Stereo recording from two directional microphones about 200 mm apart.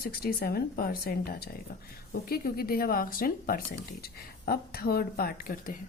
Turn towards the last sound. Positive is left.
turn(degrees=45)  # may be behind; listen again after turning